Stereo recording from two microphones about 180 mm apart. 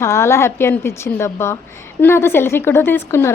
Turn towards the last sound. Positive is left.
turn(degrees=15)  # may be behind; listen again after turning